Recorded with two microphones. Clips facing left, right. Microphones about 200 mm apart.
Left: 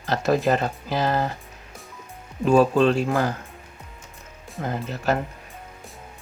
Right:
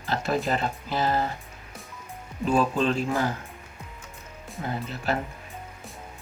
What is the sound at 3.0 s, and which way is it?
Speech, 45° left (ahead or behind).